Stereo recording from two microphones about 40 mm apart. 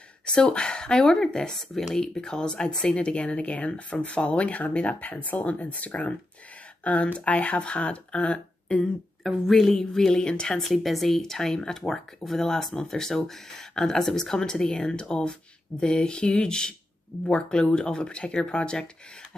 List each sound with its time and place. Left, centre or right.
0.2 s speech: left
9.5 s a sound: centre
9.8 s speech: centre
10.6 s speech: centre; by 18.9 s left